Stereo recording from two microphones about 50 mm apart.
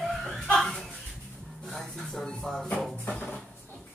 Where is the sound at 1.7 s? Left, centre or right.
Centre.